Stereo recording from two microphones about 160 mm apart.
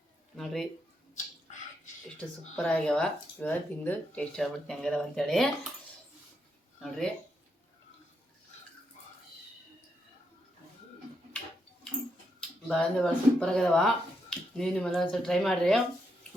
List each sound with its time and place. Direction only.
0.3 s speech: centre (ahead or behind)
1.1 s finger snapping: 50° left (ahead or behind)
2.6 s speech: 5° left (ahead or behind)
6.7 s speech: 5° left (ahead or behind)
12.4 s speech: centre (ahead or behind)